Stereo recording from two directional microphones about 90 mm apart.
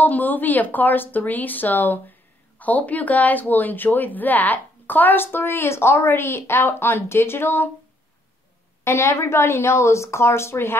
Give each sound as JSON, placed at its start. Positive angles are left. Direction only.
{"t": 0.0, "sound": "a woman's voice", "side_deg": 20}
{"t": 8.8, "sound": "a woman's voice", "side_deg": 30}